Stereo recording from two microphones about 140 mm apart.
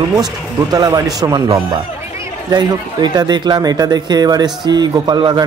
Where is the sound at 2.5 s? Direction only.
30° right (ahead or behind).